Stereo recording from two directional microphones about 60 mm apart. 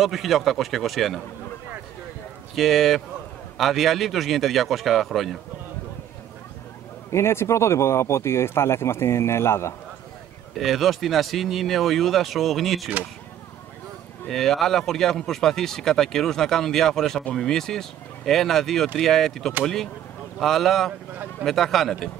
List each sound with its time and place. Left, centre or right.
0.0 s speech: centre
2.5 s speech: centre
7.1 s speech: left
10.5 s speech: centre
14.3 s speech: centre